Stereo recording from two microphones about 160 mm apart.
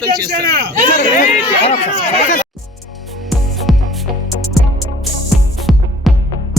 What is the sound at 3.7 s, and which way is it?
Music, centre (ahead or behind).